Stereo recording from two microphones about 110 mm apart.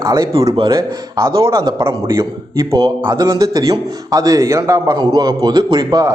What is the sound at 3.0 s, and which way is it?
A man's voice, 30° right (ahead or behind).